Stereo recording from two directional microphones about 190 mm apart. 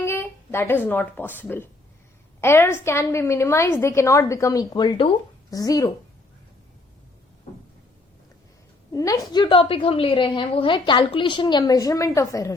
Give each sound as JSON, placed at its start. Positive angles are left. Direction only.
{"t": 0.0, "sound": "a woman's voice", "side_deg": 10}
{"t": 8.9, "sound": "a woman's voice", "side_deg": 15}